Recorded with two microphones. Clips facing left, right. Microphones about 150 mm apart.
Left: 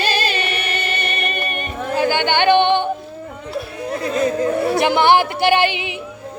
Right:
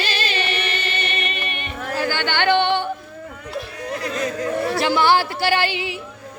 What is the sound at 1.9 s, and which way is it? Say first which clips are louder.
Music: left 6 dB; 20° left (ahead or behind).